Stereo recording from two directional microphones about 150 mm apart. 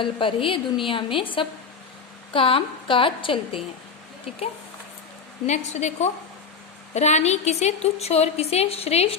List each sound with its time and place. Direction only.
0.0 s a woman's voice: 35° left (ahead or behind)
5.5 s a woman's voice: 50° left (ahead or behind)